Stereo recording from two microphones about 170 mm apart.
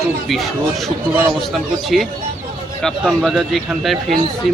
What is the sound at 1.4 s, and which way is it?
Speech, centre (ahead or behind).